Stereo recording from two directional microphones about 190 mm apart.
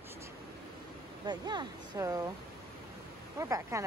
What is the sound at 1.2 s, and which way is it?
Speech, 20° right (ahead or behind).